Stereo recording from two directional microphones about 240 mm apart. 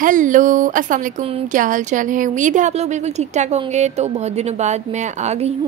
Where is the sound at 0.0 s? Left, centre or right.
Right.